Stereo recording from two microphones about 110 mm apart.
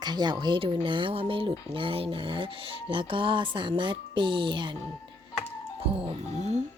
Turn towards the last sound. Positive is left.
turn(degrees=-90)